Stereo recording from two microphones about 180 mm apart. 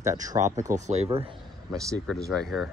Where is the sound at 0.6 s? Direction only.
40° right (ahead or behind).